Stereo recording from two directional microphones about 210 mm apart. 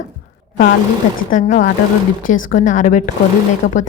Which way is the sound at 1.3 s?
40° left (ahead or behind).